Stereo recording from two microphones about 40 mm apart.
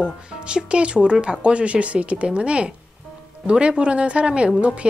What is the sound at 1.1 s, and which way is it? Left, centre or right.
Speech, centre.